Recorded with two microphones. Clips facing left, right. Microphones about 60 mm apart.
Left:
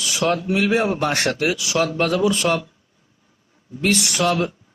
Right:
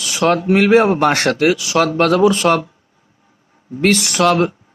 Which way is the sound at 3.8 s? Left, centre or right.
Right.